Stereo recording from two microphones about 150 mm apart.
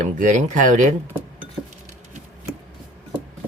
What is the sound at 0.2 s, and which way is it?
Speech, 55° right (ahead or behind).